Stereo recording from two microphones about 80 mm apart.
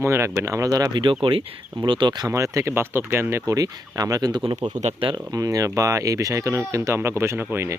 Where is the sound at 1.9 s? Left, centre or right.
Right.